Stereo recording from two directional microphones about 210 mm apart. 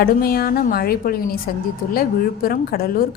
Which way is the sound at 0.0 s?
45° left (ahead or behind).